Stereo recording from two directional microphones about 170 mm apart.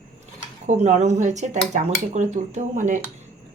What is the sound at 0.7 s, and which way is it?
Speech, 45° right (ahead or behind).